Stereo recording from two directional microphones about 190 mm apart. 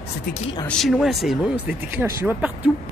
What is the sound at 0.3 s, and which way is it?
Speech, 35° left (ahead or behind).